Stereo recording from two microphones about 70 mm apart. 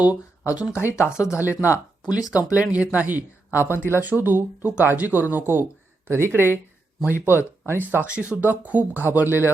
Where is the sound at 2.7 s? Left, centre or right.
Centre.